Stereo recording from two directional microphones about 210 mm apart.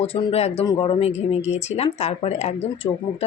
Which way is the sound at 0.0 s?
25° left (ahead or behind).